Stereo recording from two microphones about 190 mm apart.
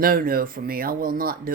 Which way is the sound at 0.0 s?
50° right (ahead or behind).